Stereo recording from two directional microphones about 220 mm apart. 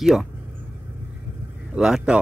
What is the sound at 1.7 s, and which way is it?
Speech, centre (ahead or behind).